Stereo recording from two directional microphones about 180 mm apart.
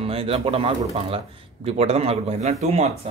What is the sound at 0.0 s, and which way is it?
Speech, 30° right (ahead or behind).